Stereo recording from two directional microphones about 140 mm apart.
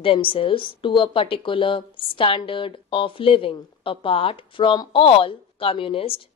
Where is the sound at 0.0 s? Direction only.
40° left (ahead or behind).